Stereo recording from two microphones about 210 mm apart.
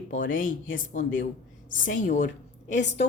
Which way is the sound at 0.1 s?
40° left (ahead or behind).